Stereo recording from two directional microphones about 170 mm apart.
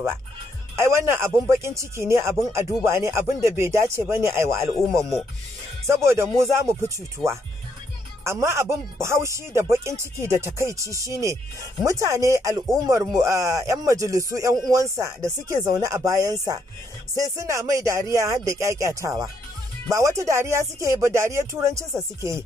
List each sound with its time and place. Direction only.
0.7 s a man's voice: 15° right (ahead or behind)
6.0 s a man's voice: 15° right (ahead or behind)
7.2 s speech: centre (ahead or behind)
8.2 s a man's voice: 15° right (ahead or behind)